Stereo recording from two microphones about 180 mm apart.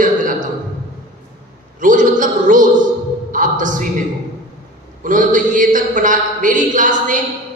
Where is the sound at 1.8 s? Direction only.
45° right (ahead or behind).